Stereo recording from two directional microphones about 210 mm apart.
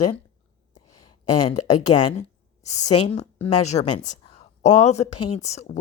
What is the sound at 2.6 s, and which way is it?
Speech, 35° left (ahead or behind).